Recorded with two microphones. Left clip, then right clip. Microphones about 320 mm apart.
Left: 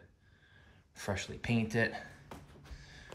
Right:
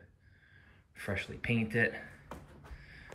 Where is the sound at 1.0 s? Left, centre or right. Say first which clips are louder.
Right 1 dB; centre.